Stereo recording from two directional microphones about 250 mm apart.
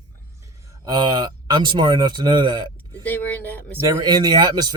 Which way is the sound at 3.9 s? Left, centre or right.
Centre.